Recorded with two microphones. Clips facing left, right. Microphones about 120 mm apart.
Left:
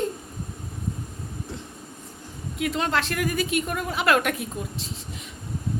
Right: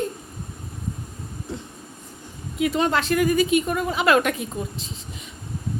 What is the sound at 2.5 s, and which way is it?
A woman's voice, centre (ahead or behind).